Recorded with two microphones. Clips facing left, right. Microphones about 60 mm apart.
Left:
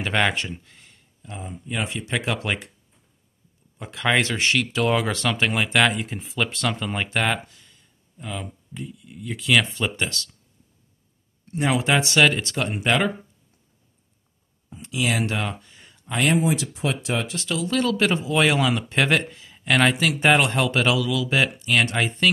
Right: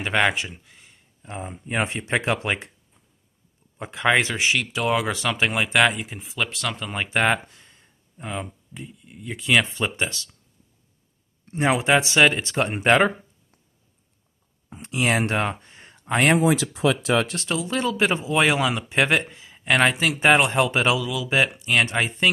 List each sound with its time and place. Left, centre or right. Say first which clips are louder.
0.0 s speech: right 1 dB; centre
1.2 s speech: right 2 dB; right
3.7 s speech: right 3 dB; right
4.1 s speech: even; centre
7.1 s a sound: right 5 dB; right
8.8 s speech: left 2 dB; centre
11.4 s speech: right 2 dB; right
14.7 s speech: right 2 dB; right
16.4 s speech: right 4 dB; right
17.6 s speech: left 1 dB; centre